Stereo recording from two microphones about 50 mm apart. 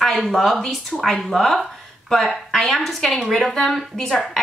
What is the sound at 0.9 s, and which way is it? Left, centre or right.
A woman's voice, centre.